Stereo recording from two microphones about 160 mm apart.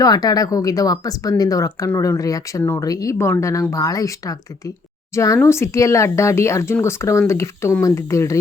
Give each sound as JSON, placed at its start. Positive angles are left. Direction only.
{"t": 0.0, "sound": "speech", "side_deg": 25}